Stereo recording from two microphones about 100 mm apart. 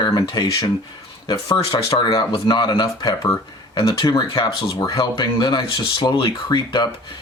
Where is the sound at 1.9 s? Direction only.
50° left (ahead or behind).